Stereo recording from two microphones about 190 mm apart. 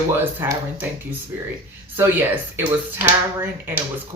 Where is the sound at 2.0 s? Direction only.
10° right (ahead or behind).